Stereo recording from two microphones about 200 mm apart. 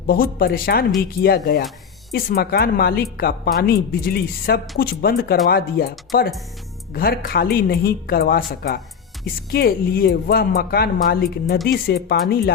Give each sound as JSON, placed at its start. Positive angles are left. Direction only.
{"t": 0.1, "sound": "a woman's voice", "side_deg": 45}